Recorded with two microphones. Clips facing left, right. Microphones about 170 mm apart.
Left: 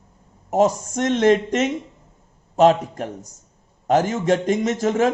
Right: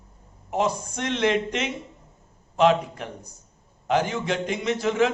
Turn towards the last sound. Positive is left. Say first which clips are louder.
# left 3 dB
turn(degrees=45)  # may be behind; listen again after turning